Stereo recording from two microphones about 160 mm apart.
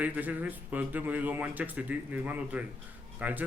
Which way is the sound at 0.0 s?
10° right (ahead or behind).